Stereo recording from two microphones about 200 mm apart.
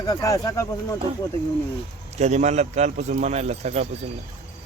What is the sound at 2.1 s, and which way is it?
A man's voice, 35° right (ahead or behind).